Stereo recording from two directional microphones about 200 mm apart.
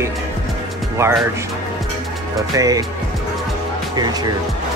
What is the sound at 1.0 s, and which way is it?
Speech, 15° right (ahead or behind).